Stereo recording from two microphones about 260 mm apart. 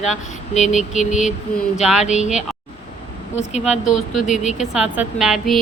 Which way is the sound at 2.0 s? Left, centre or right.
Left.